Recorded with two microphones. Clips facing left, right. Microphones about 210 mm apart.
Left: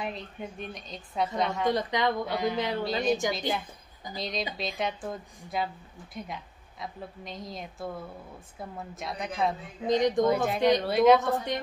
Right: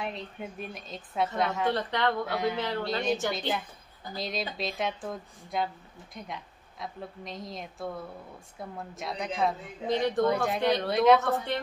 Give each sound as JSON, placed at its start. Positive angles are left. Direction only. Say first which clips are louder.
{"t": 0.0, "sound": "a woman's voice", "louder": "even", "side_deg": 0}
{"t": 1.7, "sound": "a woman's voice", "louder": "left 1 dB", "side_deg": 15}
{"t": 2.2, "sound": "a woman's voice", "louder": "even", "side_deg": 0}
{"t": 2.5, "sound": "a woman's voice", "louder": "left 2 dB", "side_deg": 15}
{"t": 4.1, "sound": "a woman's voice", "louder": "even", "side_deg": 0}
{"t": 9.8, "sound": "a woman's voice", "louder": "left 3 dB", "side_deg": 15}
{"t": 10.2, "sound": "a woman's voice", "louder": "left 2 dB", "side_deg": 0}
{"t": 11.1, "sound": "a woman's voice", "louder": "even", "side_deg": 15}